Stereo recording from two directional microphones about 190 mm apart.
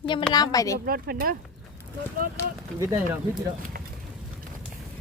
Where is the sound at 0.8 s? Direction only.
50° right (ahead or behind).